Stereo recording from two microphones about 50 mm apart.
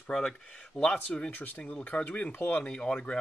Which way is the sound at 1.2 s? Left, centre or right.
Left.